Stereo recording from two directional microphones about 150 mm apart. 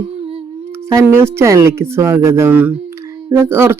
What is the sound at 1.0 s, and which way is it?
Speech, 15° right (ahead or behind).